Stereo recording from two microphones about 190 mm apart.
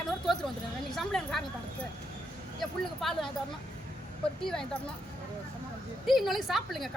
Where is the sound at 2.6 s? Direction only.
Centre (ahead or behind).